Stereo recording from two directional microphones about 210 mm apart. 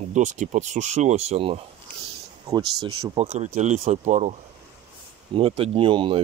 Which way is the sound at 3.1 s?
30° right (ahead or behind).